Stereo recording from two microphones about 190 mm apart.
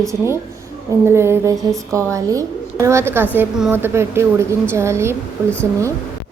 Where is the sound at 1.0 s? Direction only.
15° right (ahead or behind).